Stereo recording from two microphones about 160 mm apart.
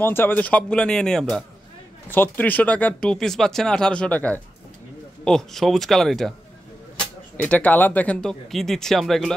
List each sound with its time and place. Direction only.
0.0 s speech: 15° left (ahead or behind)
7.4 s speech: 10° left (ahead or behind)